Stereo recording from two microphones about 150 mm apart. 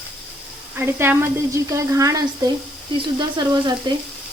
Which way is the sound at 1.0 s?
15° right (ahead or behind).